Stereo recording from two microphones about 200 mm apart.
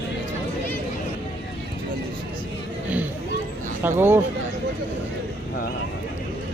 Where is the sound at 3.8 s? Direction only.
10° right (ahead or behind).